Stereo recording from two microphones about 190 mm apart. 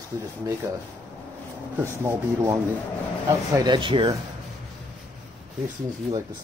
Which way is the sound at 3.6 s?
25° right (ahead or behind).